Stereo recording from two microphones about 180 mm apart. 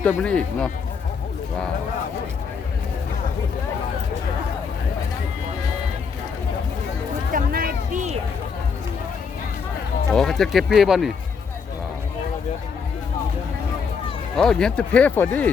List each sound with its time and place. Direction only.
0.0 s speech: 5° left (ahead or behind)
7.3 s a sound: 55° right (ahead or behind)
10.1 s speech: 5° left (ahead or behind)
14.3 s speech: 5° left (ahead or behind)